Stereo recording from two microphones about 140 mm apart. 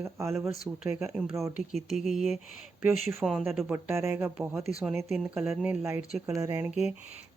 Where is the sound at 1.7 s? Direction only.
Centre (ahead or behind).